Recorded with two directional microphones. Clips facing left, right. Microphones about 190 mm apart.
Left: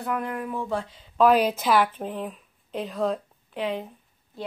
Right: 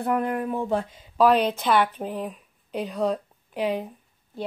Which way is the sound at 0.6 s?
20° right (ahead or behind).